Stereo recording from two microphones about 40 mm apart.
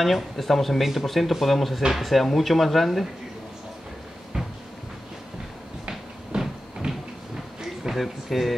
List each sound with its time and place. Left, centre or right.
0.0 s speech: centre
6.3 s a sound: centre
7.9 s speech: centre